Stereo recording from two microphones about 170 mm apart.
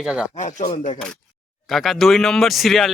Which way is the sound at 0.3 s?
45° left (ahead or behind).